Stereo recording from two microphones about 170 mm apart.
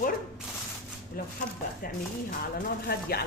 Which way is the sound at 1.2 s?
60° left (ahead or behind).